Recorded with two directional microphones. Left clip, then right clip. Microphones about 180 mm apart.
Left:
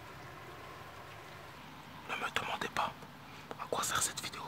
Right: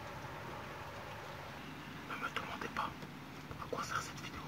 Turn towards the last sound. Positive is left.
turn(degrees=35)  # may be behind; listen again after turning